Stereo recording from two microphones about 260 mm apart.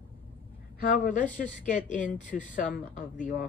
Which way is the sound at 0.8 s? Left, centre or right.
Left.